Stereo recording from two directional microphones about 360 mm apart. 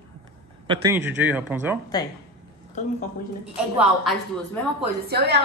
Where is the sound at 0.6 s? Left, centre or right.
Centre.